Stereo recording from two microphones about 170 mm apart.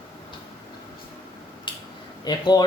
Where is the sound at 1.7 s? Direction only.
25° left (ahead or behind).